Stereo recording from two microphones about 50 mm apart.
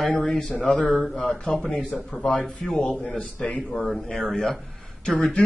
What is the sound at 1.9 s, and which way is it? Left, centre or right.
Speech, centre.